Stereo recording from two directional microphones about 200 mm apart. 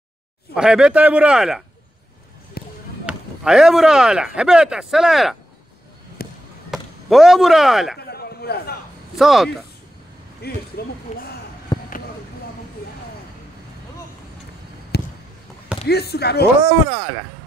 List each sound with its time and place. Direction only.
0.6 s speech: 5° right (ahead or behind)
2.6 s basketball bounce: 50° left (ahead or behind)
3.1 s speech: 5° right (ahead or behind)
6.2 s basketball bounce: 50° left (ahead or behind)
6.7 s speech: centre (ahead or behind)
8.0 s a sound: 50° left (ahead or behind)
9.1 s speech: centre (ahead or behind)
10.4 s speech: 50° left (ahead or behind)
11.1 s speech: 35° left (ahead or behind)
11.7 s a sound: 20° left (ahead or behind)
14.9 s basketball bounce: 55° left (ahead or behind)
15.9 s speech: 55° left (ahead or behind)